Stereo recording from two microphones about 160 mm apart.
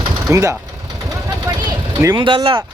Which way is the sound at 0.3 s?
20° right (ahead or behind).